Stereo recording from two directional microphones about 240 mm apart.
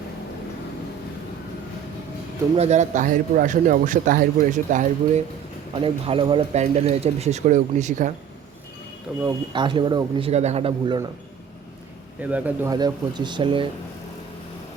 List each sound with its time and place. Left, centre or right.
2.6 s a man's voice: right
9.2 s speech: centre
12.2 s speech: centre